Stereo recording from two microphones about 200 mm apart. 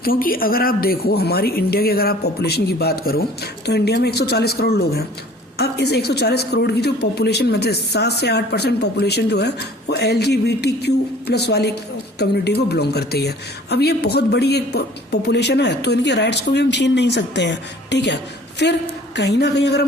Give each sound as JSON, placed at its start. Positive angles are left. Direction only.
{"t": 0.0, "sound": "a woman's voice", "side_deg": 45}